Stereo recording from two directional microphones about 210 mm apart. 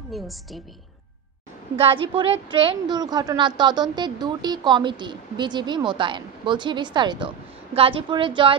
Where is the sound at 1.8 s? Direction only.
25° right (ahead or behind).